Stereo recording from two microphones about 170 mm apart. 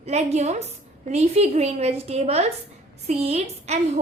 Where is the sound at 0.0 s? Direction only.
40° right (ahead or behind).